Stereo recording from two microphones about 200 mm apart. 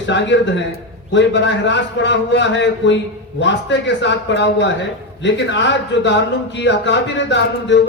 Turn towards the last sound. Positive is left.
turn(degrees=60)  # may be behind; listen again after turning